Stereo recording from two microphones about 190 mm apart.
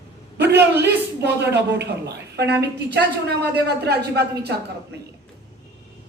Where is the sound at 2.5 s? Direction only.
60° right (ahead or behind).